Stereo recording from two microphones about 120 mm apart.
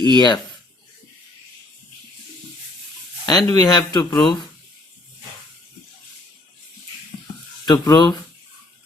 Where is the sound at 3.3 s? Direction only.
35° left (ahead or behind).